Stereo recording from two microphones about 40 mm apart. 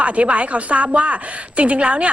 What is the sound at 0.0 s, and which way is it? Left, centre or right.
A woman's voice, right.